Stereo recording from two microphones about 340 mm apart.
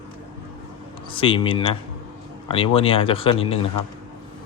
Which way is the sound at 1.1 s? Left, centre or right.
Centre.